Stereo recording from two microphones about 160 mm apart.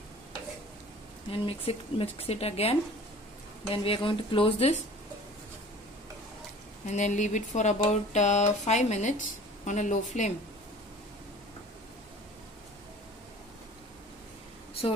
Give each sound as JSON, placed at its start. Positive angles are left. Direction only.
{"t": 1.3, "sound": "speech", "side_deg": 35}
{"t": 6.9, "sound": "speech", "side_deg": 50}